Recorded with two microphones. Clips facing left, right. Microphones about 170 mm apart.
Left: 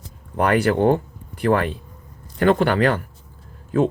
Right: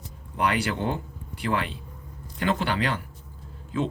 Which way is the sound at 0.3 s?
50° left (ahead or behind).